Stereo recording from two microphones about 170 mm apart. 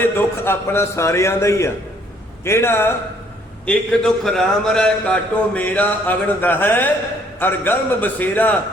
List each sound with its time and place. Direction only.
0.0 s a man's voice: 15° left (ahead or behind)
3.7 s a man's voice: 5° left (ahead or behind)